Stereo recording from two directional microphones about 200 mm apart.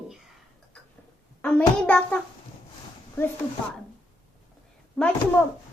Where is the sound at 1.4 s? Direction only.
5° left (ahead or behind).